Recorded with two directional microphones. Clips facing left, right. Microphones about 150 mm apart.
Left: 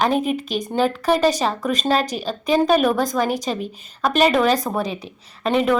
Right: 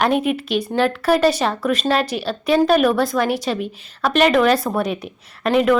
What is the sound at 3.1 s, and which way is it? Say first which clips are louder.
Speech: right 2 dB; 40° left (ahead or behind).